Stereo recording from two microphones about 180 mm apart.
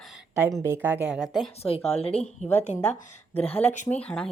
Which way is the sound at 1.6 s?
35° left (ahead or behind).